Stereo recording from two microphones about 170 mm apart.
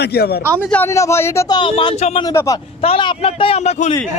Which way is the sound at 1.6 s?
30° left (ahead or behind).